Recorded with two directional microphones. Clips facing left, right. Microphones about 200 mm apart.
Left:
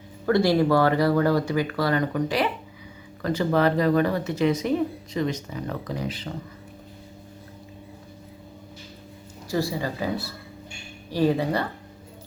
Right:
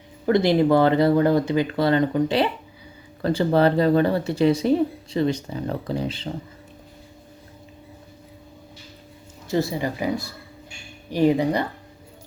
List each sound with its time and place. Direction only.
0.3 s speech: 20° right (ahead or behind)
9.5 s speech: 20° right (ahead or behind)